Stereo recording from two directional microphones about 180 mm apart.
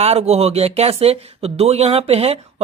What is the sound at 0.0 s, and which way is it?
Speech, 35° right (ahead or behind).